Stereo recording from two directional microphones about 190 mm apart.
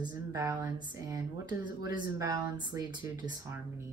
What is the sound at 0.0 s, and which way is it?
Speech, 20° right (ahead or behind).